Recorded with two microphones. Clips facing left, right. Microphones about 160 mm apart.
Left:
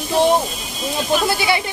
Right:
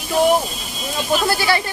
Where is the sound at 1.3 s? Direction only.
15° left (ahead or behind).